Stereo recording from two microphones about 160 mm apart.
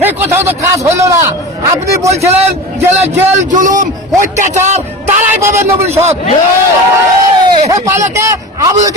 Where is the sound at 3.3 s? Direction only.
50° right (ahead or behind).